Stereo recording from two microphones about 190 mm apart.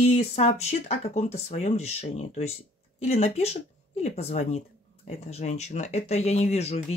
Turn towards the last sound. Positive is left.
turn(degrees=35)  # may be behind; listen again after turning